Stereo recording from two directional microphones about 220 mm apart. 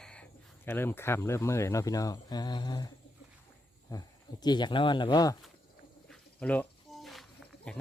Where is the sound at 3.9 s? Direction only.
20° left (ahead or behind).